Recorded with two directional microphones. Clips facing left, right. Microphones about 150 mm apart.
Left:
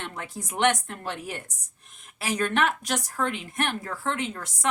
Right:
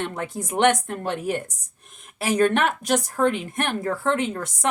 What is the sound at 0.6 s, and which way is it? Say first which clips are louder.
A woman's voice: right 4 dB; 50° right (ahead or behind).